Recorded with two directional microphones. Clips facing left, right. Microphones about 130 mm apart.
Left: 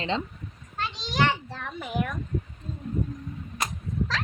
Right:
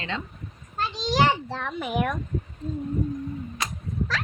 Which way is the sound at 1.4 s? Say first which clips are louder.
Right 5 dB; 80° right.